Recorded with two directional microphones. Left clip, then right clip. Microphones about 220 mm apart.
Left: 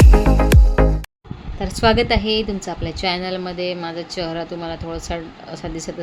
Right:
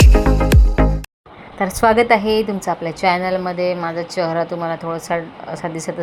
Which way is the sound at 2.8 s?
15° left (ahead or behind).